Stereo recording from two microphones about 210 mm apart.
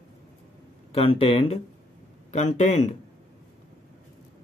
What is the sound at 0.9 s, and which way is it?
Speech, 25° left (ahead or behind).